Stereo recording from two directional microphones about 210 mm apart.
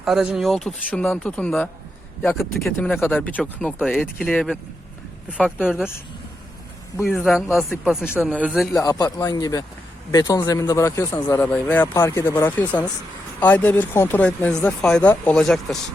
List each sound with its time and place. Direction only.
0.0 s speech: centre (ahead or behind)
7.0 s speech: centre (ahead or behind)
8.7 s speech: 15° left (ahead or behind)